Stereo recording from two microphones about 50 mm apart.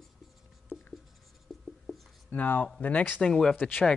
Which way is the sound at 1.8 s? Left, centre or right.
Centre.